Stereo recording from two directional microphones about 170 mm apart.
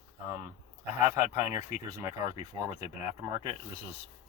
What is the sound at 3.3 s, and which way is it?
Speech, 25° right (ahead or behind).